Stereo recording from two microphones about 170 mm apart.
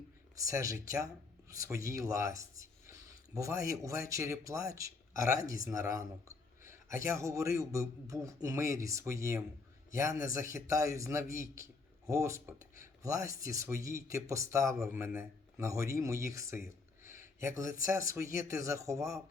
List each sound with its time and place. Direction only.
0.3 s a man's voice: 20° right (ahead or behind)
17.0 s a sound: 15° right (ahead or behind)
17.8 s a man's voice: 15° right (ahead or behind)